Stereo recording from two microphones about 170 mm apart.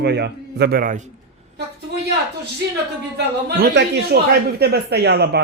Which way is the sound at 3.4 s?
70° right (ahead or behind).